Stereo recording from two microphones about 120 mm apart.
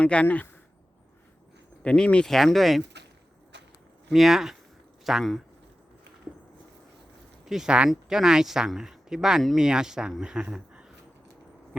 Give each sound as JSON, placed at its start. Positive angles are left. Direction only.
{"t": 0.0, "sound": "speech", "side_deg": 10}
{"t": 1.8, "sound": "speech", "side_deg": 10}
{"t": 4.1, "sound": "speech", "side_deg": -5}
{"t": 7.4, "sound": "speech", "side_deg": -5}